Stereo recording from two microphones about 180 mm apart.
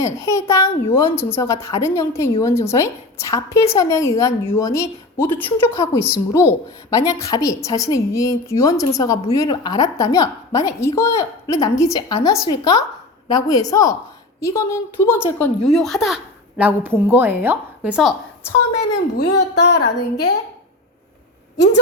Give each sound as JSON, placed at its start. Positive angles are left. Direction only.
{"t": 0.0, "sound": "a woman's voice", "side_deg": 15}
{"t": 19.1, "sound": "speech", "side_deg": 65}